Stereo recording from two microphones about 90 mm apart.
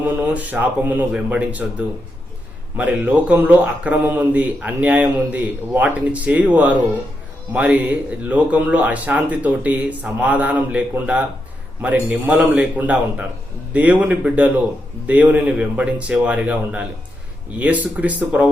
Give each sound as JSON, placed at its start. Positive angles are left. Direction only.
{"t": 0.0, "sound": "speech", "side_deg": -15}
{"t": 2.7, "sound": "speech", "side_deg": -15}